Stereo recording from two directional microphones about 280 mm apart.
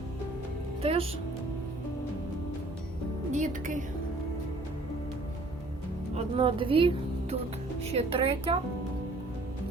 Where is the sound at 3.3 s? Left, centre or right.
Right.